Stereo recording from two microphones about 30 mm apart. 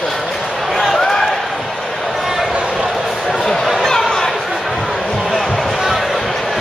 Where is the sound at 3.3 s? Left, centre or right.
Centre.